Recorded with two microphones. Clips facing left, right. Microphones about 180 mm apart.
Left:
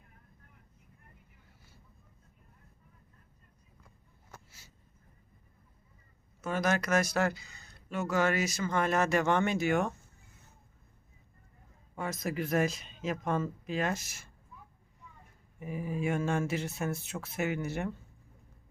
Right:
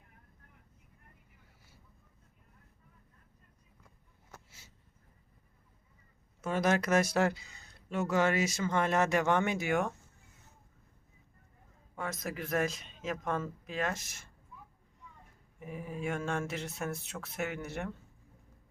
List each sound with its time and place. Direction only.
6.4 s speech: 25° right (ahead or behind)
11.9 s a man's voice: centre (ahead or behind)
15.6 s a man's voice: 5° left (ahead or behind)